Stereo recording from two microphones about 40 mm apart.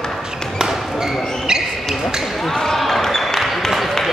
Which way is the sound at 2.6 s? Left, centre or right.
Centre.